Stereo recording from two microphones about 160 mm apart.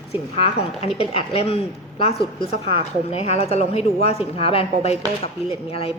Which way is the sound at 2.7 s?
40° left (ahead or behind).